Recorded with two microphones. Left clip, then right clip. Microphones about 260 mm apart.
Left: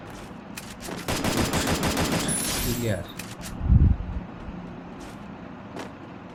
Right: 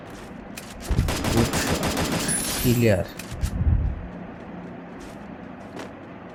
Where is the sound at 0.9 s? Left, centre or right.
Centre.